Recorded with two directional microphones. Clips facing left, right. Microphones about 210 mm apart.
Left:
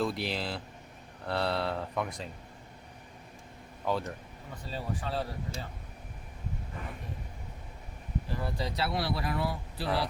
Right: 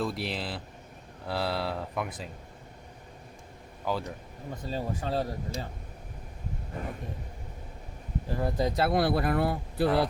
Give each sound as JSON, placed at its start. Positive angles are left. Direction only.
{"t": 0.0, "sound": "speech", "side_deg": 0}
{"t": 3.8, "sound": "speech", "side_deg": 0}
{"t": 4.7, "sound": "speech", "side_deg": -45}
{"t": 8.3, "sound": "speech", "side_deg": -45}